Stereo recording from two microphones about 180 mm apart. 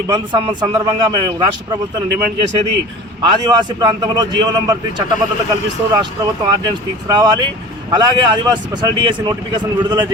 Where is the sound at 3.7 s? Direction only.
20° right (ahead or behind).